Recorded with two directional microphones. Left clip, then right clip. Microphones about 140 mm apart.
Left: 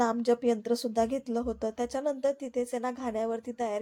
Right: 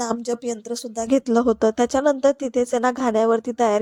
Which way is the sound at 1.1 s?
55° right (ahead or behind).